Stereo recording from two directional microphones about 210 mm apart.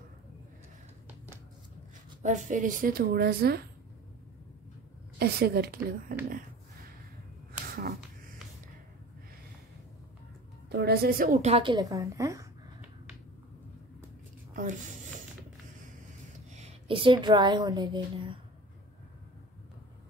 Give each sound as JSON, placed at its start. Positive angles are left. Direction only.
{"t": 2.2, "sound": "a woman's voice", "side_deg": -35}
{"t": 5.2, "sound": "a woman's voice", "side_deg": -50}
{"t": 6.2, "sound": "a sound", "side_deg": -45}
{"t": 10.7, "sound": "a woman's voice", "side_deg": -50}
{"t": 14.5, "sound": "a sound", "side_deg": -35}
{"t": 16.5, "sound": "a woman's voice", "side_deg": -30}